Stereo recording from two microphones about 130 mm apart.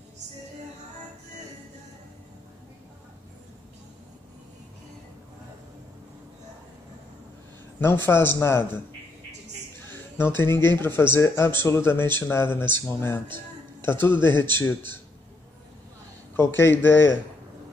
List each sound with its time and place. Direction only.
7.8 s speech: 20° left (ahead or behind)
10.2 s a man's voice: 15° left (ahead or behind)
16.3 s a man's voice: 20° left (ahead or behind)